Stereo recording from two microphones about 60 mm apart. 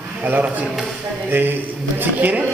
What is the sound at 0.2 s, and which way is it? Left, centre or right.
A man's voice, right.